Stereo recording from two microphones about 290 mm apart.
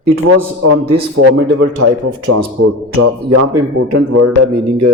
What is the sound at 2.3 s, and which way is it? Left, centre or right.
A man's voice, right.